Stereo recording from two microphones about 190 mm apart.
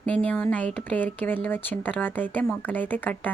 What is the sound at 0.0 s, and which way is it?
Speech, 5° left (ahead or behind).